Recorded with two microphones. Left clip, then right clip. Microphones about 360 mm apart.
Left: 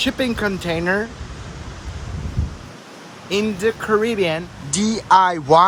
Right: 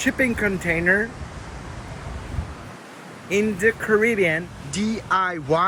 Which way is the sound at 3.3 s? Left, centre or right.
Centre.